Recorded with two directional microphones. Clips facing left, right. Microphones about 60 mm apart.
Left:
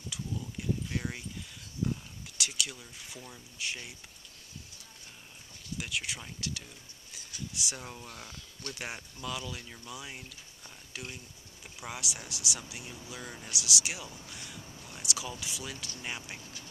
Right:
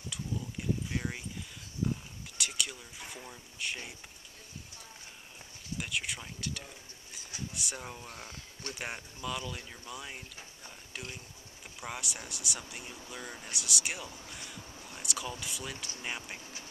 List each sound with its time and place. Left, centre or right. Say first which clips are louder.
0.1 s a sound: even; centre
3.3 s speech: left 1 dB; centre
5.8 s speech: even; centre
8.1 s speech: right 1 dB; right
8.7 s speech: right 1 dB; centre
10.9 s a sound: left 1 dB; centre
11.8 s speech: even; centre
14.9 s a sound: even; centre
15.4 s speech: even; centre